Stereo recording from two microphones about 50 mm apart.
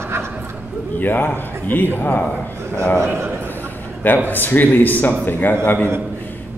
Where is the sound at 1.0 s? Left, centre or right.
Left.